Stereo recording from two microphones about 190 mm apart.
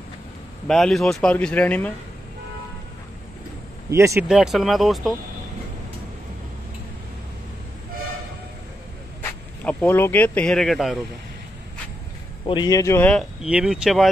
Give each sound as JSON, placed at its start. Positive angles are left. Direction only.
{"t": 0.7, "sound": "speech", "side_deg": 0}
{"t": 3.9, "sound": "speech", "side_deg": -15}
{"t": 4.3, "sound": "speech", "side_deg": 0}
{"t": 9.2, "sound": "speech", "side_deg": 10}
{"t": 12.4, "sound": "speech", "side_deg": 20}
{"t": 13.4, "sound": "speech", "side_deg": -5}